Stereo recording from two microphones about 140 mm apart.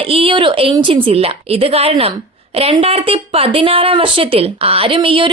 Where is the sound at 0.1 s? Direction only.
40° right (ahead or behind).